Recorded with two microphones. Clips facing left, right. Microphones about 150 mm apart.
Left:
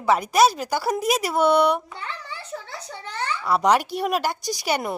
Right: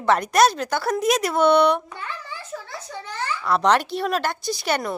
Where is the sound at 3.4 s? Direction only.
10° left (ahead or behind).